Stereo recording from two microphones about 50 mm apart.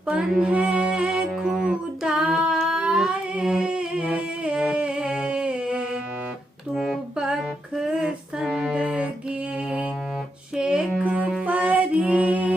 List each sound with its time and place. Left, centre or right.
0.3 s music: centre
2.6 s humming: centre
3.4 s music: centre
8.8 s music: right
10.6 s music: centre